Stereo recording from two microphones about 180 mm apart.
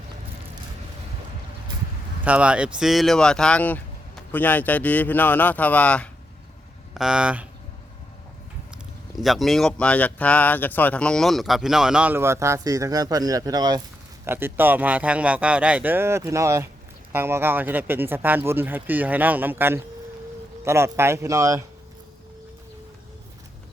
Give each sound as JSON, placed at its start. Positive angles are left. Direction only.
{"t": 2.2, "sound": "speech", "side_deg": -5}
{"t": 6.9, "sound": "speech", "side_deg": -5}
{"t": 9.1, "sound": "speech", "side_deg": 0}
{"t": 14.3, "sound": "speech", "side_deg": -10}